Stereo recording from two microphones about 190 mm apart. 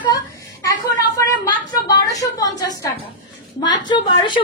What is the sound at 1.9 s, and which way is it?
Speech, 20° left (ahead or behind).